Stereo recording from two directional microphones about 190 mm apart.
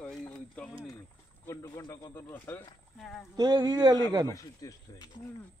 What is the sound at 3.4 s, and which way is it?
Speech, 20° right (ahead or behind).